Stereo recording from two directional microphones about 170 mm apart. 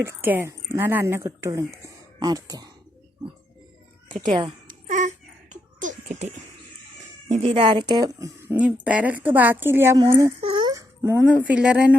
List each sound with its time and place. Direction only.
0.0 s speech: 15° right (ahead or behind)
4.7 s a sound: 45° right (ahead or behind)
7.3 s speech: 35° right (ahead or behind); by 8.5 s 20° right (ahead or behind)
8.5 s speech: 5° right (ahead or behind)
10.4 s babbling: 30° right (ahead or behind); by 11.3 s 15° right (ahead or behind)
11.4 s speech: 5° right (ahead or behind)